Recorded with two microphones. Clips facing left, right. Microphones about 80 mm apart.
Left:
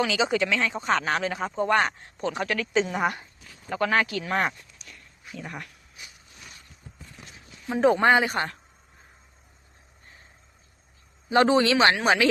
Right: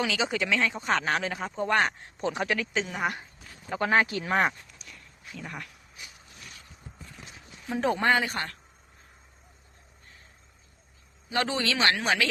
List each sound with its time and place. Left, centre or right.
0.0 s speech: centre
2.7 s speech: centre
3.8 s speech: right
4.3 s speech: centre
5.2 s a sound: centre
7.7 s speech: centre
11.3 s speech: left